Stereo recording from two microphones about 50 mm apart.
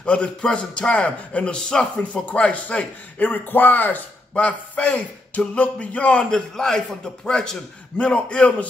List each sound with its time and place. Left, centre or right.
0.0 s a man's voice: left
3.2 s a man's voice: left
6.5 s a man's voice: centre